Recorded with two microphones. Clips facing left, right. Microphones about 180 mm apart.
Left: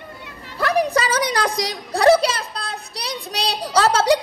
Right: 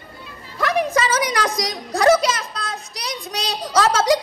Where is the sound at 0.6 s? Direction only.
35° left (ahead or behind).